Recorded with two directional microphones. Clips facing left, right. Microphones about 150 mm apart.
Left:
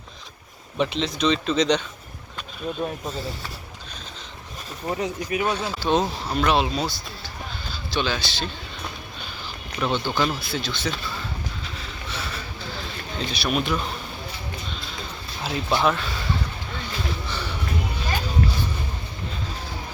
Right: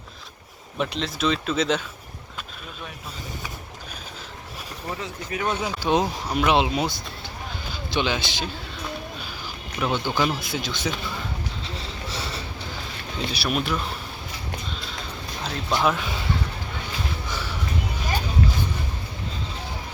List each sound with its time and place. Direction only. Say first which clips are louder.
0.8 s speech: left 3 dB; centre (ahead or behind)
4.9 s speech: left 6 dB; 20° left (ahead or behind)
5.5 s speech: right 2 dB; 15° right (ahead or behind)
9.8 s speech: even; 10° right (ahead or behind)
11.6 s a sound: right 2 dB; 30° right (ahead or behind)
13.1 s speech: left 1 dB; 5° right (ahead or behind)
15.4 s speech: left 1 dB; 5° left (ahead or behind)
17.2 s a sound: left 1 dB; 10° right (ahead or behind)